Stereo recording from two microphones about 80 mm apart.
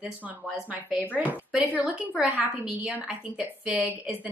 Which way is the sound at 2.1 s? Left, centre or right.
Centre.